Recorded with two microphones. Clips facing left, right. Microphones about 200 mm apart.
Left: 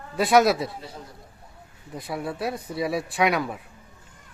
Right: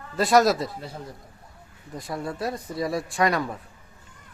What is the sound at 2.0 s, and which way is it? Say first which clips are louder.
Speech: left 1 dB; 5° left (ahead or behind).